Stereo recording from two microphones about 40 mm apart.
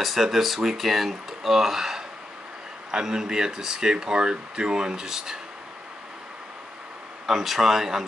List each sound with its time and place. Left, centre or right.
0.0 s speech: centre
7.2 s speech: centre